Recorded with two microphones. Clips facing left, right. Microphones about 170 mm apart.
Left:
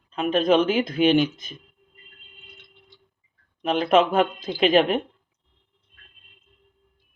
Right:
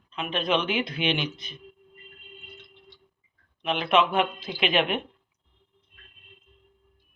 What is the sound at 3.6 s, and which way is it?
Speech, 40° left (ahead or behind).